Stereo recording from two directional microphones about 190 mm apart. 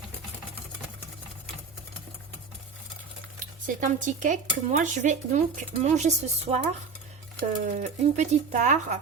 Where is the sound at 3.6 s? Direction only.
40° right (ahead or behind).